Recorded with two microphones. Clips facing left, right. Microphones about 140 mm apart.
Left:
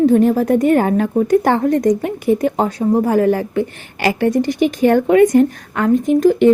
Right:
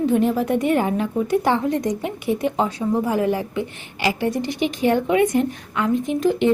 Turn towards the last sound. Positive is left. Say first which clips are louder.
# left 7 dB
turn(degrees=45)  # may be behind; listen again after turning